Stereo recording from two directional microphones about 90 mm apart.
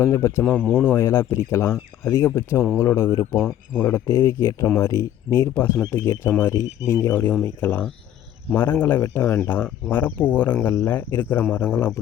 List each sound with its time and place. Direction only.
0.0 s speech: 30° left (ahead or behind)